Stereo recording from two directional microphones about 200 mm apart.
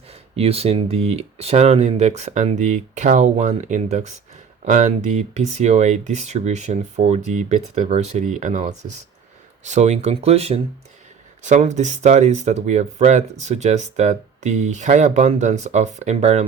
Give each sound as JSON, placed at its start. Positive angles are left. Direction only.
{"t": 0.1, "sound": "speech", "side_deg": -30}